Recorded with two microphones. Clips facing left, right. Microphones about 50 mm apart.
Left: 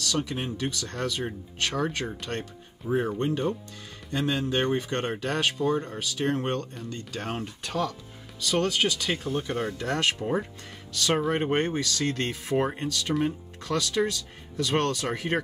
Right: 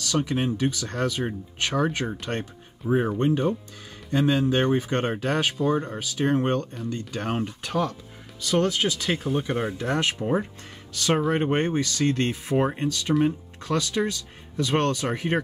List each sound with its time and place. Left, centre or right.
0.1 s speech: centre
10.2 s speech: centre
10.9 s speech: right
11.1 s speech: centre
11.5 s speech: centre